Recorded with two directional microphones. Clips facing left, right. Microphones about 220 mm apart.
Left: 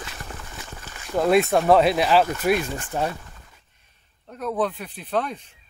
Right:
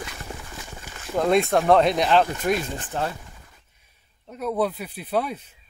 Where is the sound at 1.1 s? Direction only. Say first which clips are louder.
Left 1 dB; 5° left (ahead or behind).